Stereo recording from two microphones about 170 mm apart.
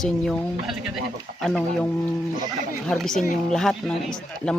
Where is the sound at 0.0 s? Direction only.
Centre (ahead or behind).